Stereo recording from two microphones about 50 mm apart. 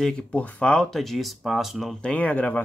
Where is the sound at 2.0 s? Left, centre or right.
Left.